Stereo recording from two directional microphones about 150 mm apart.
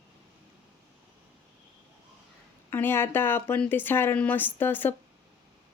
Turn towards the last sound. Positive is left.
turn(degrees=15)  # may be behind; listen again after turning